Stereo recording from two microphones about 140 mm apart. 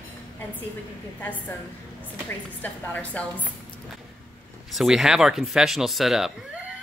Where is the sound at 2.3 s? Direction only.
10° left (ahead or behind).